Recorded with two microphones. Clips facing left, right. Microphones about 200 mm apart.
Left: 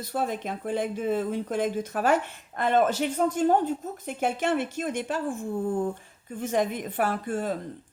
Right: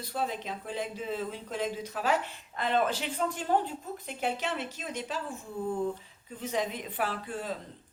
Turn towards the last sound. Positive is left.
turn(degrees=50)  # may be behind; listen again after turning